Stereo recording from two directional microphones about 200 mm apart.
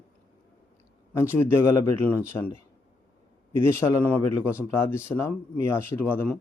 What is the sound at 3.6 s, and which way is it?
Speech, 15° left (ahead or behind).